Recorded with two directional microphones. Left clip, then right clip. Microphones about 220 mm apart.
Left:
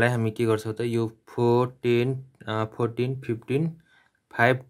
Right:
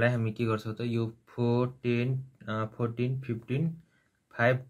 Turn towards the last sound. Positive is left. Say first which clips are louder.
# left 5 dB
turn(degrees=45)  # may be behind; listen again after turning